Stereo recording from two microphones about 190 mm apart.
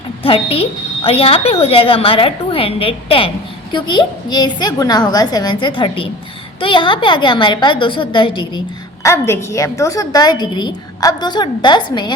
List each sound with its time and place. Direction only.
0.2 s a woman's voice: 30° left (ahead or behind)
9.0 s a woman's voice: 15° left (ahead or behind)